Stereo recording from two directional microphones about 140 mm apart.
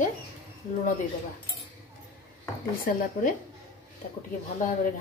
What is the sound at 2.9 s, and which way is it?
Speech, 90° left.